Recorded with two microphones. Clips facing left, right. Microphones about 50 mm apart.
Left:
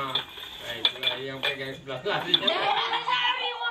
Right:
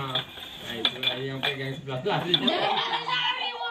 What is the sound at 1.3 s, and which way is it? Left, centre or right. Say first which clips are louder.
Speech: even; centre.